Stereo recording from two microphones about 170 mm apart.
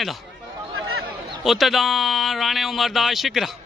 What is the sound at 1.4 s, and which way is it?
Speech, centre (ahead or behind).